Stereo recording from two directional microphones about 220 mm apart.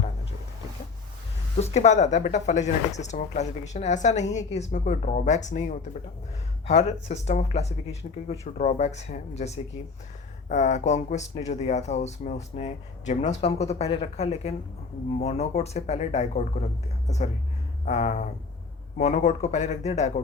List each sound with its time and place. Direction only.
1.5 s speech: 30° left (ahead or behind)
17.8 s speech: 35° left (ahead or behind)